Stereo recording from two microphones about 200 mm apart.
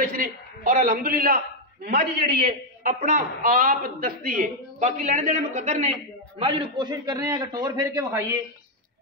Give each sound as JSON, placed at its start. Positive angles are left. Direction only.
{"t": 0.7, "sound": "a man's voice", "side_deg": -45}
{"t": 2.8, "sound": "a man's voice", "side_deg": -40}
{"t": 6.4, "sound": "a man's voice", "side_deg": -25}